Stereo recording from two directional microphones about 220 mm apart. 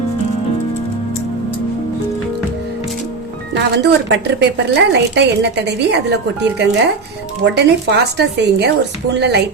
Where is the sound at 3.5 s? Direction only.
50° right (ahead or behind).